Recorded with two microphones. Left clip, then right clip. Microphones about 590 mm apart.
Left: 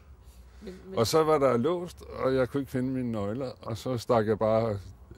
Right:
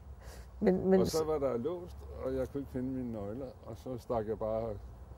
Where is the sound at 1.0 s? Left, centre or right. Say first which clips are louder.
Left 8 dB; left.